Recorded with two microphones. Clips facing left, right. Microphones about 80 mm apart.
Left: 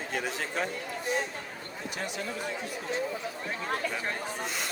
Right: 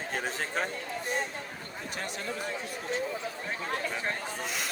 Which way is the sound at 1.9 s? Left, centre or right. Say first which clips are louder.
Left 2 dB; right.